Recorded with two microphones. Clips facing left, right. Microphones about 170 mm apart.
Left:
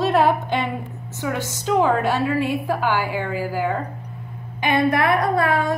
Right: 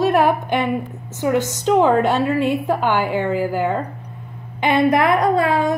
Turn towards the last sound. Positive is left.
turn(degrees=-20)  # may be behind; listen again after turning